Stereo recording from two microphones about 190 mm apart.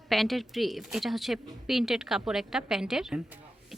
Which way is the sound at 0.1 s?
Centre (ahead or behind).